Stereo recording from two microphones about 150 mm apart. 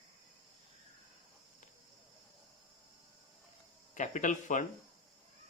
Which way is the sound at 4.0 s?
55° left (ahead or behind).